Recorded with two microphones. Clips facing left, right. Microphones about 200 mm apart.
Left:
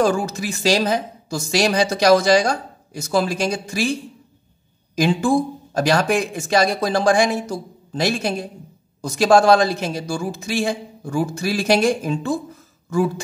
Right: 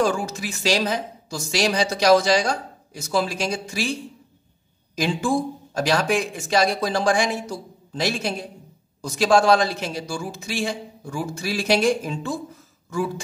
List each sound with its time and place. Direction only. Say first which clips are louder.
0.0 s a woman's voice: left 3 dB; 45° left (ahead or behind)
4.9 s a woman's voice: left 5 dB; 45° left (ahead or behind)